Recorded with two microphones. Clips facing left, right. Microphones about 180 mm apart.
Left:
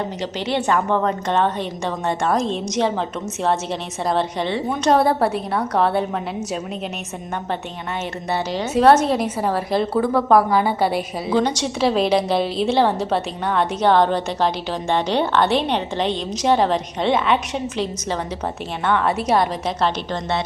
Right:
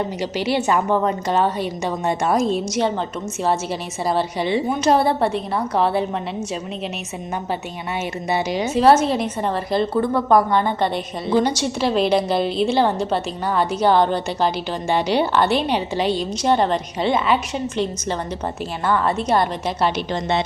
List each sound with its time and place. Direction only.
0.2 s a woman's voice: 10° right (ahead or behind)
8.3 s a woman's voice: 15° right (ahead or behind)
8.7 s a woman's voice: centre (ahead or behind)
11.3 s a woman's voice: 5° right (ahead or behind)